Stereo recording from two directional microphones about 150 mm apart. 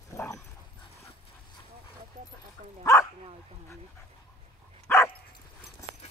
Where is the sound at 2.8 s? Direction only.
20° left (ahead or behind).